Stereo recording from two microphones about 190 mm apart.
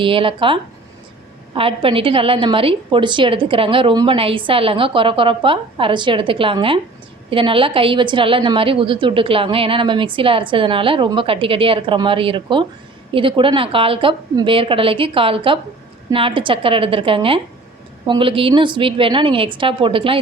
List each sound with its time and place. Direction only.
0.0 s a woman's voice: 30° right (ahead or behind)